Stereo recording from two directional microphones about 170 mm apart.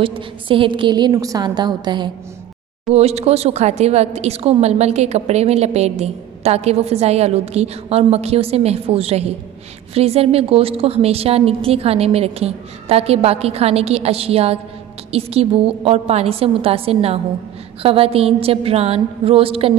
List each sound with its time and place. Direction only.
0.0 s a woman's voice: 30° right (ahead or behind)
2.9 s a woman's voice: 40° right (ahead or behind)